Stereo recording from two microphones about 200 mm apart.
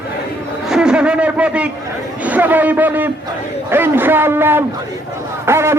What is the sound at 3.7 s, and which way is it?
Speech, 10° right (ahead or behind).